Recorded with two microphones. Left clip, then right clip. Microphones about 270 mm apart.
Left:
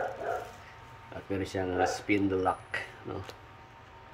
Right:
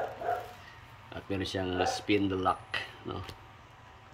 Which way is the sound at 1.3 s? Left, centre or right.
Right.